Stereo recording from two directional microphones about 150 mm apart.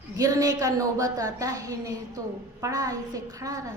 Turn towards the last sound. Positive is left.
turn(degrees=-20)  # may be behind; listen again after turning